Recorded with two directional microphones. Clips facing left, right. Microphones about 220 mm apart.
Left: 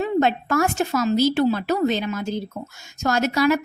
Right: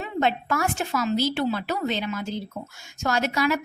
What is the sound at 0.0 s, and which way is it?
A woman's voice, 45° left (ahead or behind).